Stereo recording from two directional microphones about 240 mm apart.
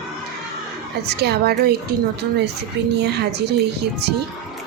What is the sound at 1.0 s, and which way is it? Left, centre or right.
Speech, right.